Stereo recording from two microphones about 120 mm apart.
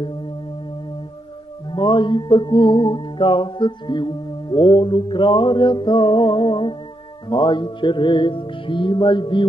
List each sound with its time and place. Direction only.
1.7 s music: 40° left (ahead or behind)